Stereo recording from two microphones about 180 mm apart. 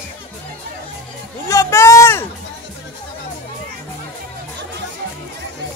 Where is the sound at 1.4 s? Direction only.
15° left (ahead or behind).